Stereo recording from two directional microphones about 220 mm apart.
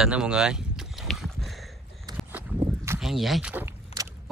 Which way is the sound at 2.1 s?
10° right (ahead or behind).